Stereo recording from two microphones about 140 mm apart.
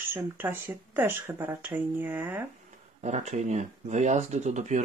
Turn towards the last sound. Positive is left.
turn(degrees=-60)  # may be behind; listen again after turning